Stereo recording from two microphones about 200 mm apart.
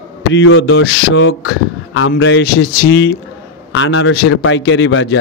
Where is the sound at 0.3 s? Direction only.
75° left (ahead or behind).